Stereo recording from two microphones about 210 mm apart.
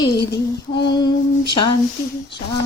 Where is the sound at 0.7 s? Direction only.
55° left (ahead or behind).